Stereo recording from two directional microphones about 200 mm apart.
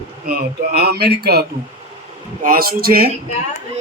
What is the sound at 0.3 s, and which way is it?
Speech, 50° right (ahead or behind).